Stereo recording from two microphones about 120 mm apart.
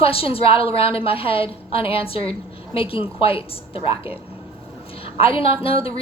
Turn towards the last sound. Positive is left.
turn(degrees=50)  # may be behind; listen again after turning